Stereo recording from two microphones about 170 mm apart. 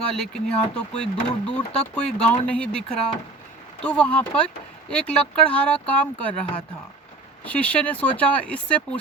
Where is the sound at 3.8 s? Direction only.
5° left (ahead or behind).